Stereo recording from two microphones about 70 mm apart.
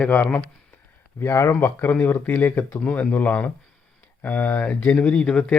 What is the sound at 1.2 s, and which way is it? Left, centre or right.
Speech, left.